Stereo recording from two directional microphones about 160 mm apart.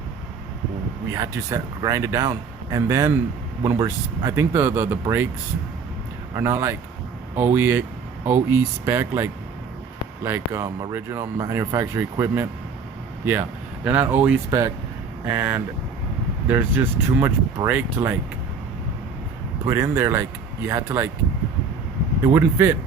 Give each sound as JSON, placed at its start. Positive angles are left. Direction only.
{"t": 1.1, "sound": "speech", "side_deg": -20}
{"t": 6.3, "sound": "speech", "side_deg": -15}
{"t": 13.8, "sound": "speech", "side_deg": -10}
{"t": 19.6, "sound": "speech", "side_deg": -20}
{"t": 22.2, "sound": "speech", "side_deg": -15}